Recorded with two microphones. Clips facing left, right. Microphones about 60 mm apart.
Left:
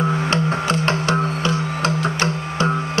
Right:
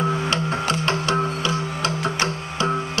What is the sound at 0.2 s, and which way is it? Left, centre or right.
Music, left.